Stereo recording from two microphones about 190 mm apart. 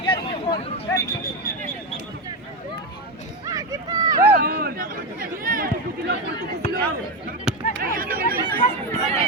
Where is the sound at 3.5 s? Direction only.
20° right (ahead or behind).